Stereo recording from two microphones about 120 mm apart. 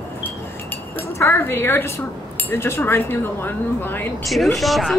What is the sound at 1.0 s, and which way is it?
A woman's voice, 20° left (ahead or behind).